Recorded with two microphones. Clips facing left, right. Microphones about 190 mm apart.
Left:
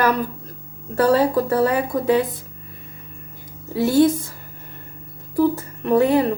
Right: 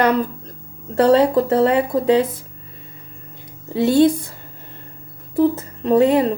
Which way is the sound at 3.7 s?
25° right (ahead or behind).